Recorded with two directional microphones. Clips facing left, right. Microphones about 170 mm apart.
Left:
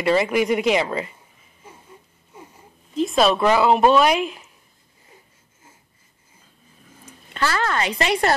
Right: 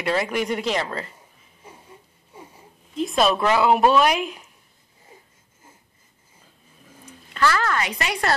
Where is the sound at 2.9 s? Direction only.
Centre (ahead or behind).